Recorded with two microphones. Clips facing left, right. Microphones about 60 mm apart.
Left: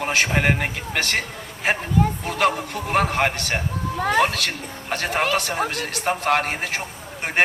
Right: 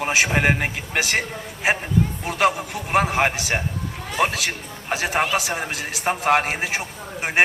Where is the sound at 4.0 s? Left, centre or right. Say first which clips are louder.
Left 5 dB; left.